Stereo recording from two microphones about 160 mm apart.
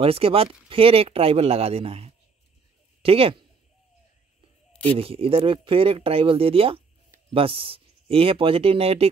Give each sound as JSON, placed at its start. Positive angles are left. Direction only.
{"t": 0.0, "sound": "speech", "side_deg": -35}
{"t": 4.8, "sound": "speech", "side_deg": -35}